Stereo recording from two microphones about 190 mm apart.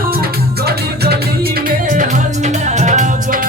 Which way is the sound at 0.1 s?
55° right (ahead or behind).